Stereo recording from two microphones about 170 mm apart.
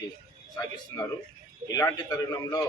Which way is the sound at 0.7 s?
20° left (ahead or behind).